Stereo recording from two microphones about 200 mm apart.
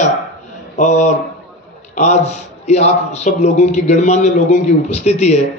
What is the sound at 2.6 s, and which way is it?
A man's voice, 35° left (ahead or behind).